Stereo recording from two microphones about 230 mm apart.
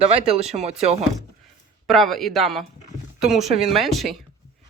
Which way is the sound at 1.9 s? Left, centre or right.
Centre.